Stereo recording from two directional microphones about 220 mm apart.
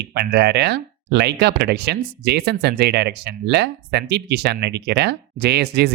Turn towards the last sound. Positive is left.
turn(degrees=-50)  # may be behind; listen again after turning